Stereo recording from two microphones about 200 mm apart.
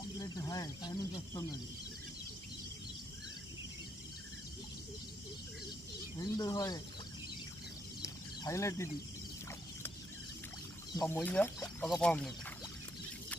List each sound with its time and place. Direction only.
0.2 s speech: 15° left (ahead or behind)
6.3 s speech: 20° left (ahead or behind)
8.0 s a sound: 15° left (ahead or behind)
10.9 s speech: 10° left (ahead or behind)